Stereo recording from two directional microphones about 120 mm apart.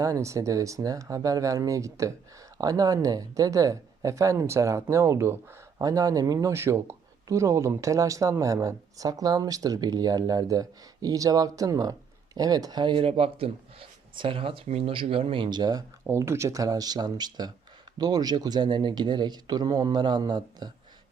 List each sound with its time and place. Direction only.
0.0 s speech: 25° right (ahead or behind)
16.0 s speech: 20° right (ahead or behind)